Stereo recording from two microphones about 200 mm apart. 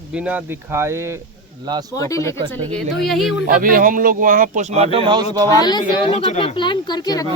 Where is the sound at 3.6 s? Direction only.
45° right (ahead or behind); by 5.2 s 25° right (ahead or behind).